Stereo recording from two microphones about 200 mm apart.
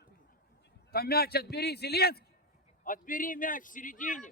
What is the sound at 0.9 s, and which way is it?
A man's voice, 50° left (ahead or behind).